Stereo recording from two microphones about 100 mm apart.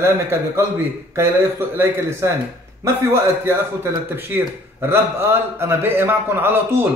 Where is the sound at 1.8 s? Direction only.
30° right (ahead or behind).